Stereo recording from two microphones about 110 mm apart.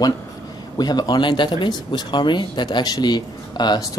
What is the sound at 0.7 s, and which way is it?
Speech, 40° left (ahead or behind).